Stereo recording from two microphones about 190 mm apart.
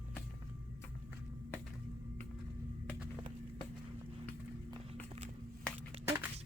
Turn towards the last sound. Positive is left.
turn(degrees=-30)  # may be behind; listen again after turning